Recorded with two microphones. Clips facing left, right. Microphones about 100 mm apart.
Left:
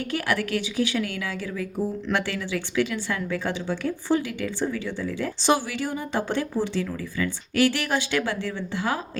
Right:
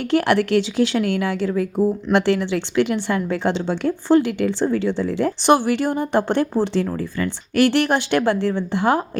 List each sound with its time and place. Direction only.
0.1 s speech: 70° right (ahead or behind)
5.1 s speech: 60° right (ahead or behind)
7.3 s speech: 60° right (ahead or behind)